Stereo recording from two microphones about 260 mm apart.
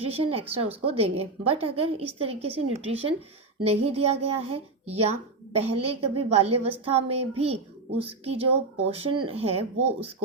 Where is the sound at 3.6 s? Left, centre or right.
Right.